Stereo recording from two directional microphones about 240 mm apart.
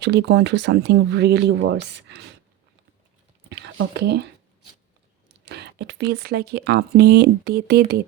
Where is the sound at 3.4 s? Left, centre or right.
Right.